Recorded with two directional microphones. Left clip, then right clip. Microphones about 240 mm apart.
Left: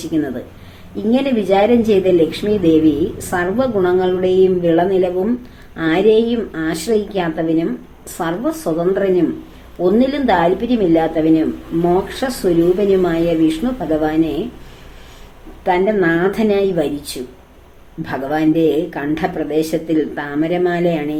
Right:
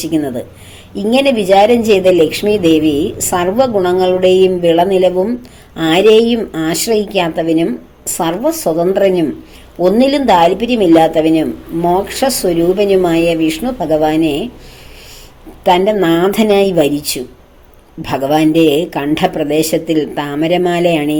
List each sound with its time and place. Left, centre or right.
0.0 s a woman's voice: right
15.6 s a woman's voice: right
18.0 s a woman's voice: right